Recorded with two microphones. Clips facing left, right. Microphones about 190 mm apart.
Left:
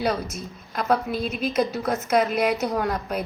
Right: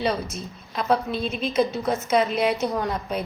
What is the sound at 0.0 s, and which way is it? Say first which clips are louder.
A woman's voice: even; centre (ahead or behind).